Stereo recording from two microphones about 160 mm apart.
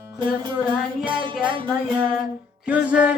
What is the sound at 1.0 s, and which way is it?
Music, 30° right (ahead or behind).